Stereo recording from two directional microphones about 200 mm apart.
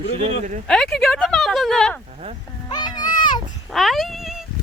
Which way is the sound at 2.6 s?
20° left (ahead or behind).